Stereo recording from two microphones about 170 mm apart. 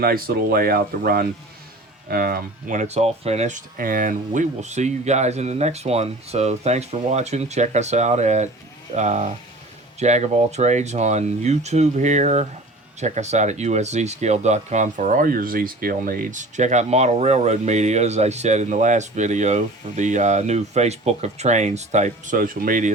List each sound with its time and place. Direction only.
0.0 s speech: 60° right (ahead or behind)